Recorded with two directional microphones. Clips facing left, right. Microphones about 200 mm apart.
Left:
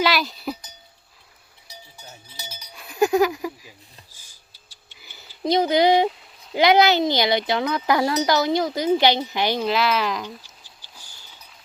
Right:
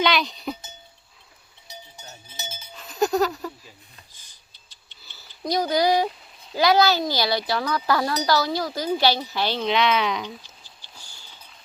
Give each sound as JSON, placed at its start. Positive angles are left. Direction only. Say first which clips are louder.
{"t": 0.0, "sound": "cowbell", "louder": "left 1 dB", "side_deg": 5}
{"t": 1.7, "sound": "cowbell", "louder": "right 1 dB", "side_deg": -20}
{"t": 2.7, "sound": "a sound", "louder": "left 3 dB", "side_deg": 10}
{"t": 6.5, "sound": "speech", "louder": "left 2 dB", "side_deg": 20}
{"t": 9.6, "sound": "speech", "louder": "even", "side_deg": 0}